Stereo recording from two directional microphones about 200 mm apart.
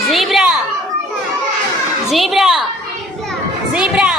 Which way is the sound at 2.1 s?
Centre (ahead or behind).